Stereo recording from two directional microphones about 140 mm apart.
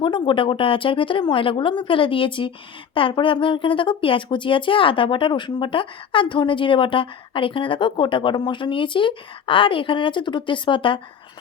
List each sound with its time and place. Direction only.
0.0 s speech: 35° left (ahead or behind)